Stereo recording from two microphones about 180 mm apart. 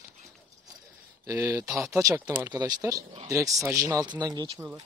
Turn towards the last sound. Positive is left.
turn(degrees=-20)  # may be behind; listen again after turning